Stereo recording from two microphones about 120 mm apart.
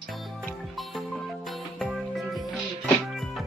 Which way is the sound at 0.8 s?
Centre (ahead or behind).